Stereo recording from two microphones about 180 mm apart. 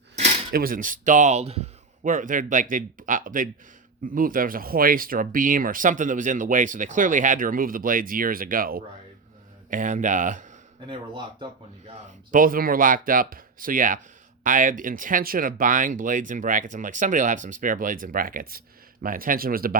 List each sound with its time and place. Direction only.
0.5 s speech: 50° right (ahead or behind)
10.8 s speech: 30° right (ahead or behind)
12.3 s speech: 50° right (ahead or behind)